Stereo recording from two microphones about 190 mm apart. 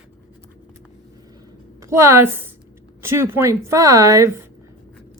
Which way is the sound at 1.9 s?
15° right (ahead or behind).